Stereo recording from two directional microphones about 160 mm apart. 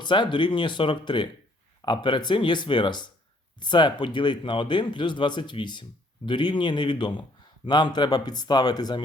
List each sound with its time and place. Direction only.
0.0 s speech: 30° left (ahead or behind)